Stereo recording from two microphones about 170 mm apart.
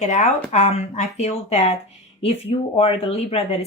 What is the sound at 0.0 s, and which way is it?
Speech, 40° left (ahead or behind).